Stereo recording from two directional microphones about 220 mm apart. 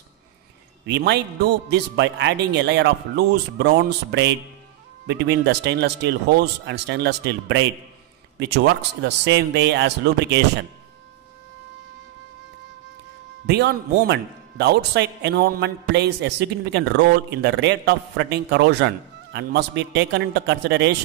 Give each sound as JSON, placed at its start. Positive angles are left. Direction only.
{"t": 0.8, "sound": "speech", "side_deg": -50}
{"t": 13.5, "sound": "speech", "side_deg": -50}